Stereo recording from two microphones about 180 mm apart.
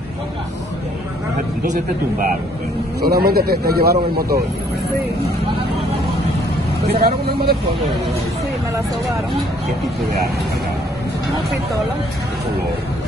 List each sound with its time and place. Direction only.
1.6 s speech: 50° right (ahead or behind)
3.0 s speech: 60° right (ahead or behind)
6.9 s speech: 60° right (ahead or behind)